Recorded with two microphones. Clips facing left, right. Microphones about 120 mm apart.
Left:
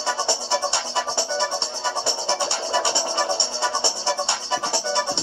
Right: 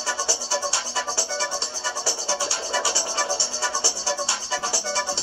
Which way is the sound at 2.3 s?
25° left (ahead or behind).